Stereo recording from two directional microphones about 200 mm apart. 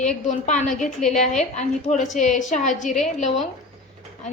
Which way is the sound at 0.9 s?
Centre (ahead or behind).